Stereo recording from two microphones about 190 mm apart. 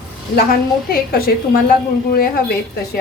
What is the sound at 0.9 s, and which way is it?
A woman's voice, 50° left (ahead or behind).